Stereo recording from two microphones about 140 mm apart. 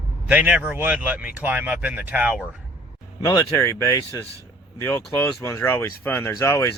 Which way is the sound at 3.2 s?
25° left (ahead or behind).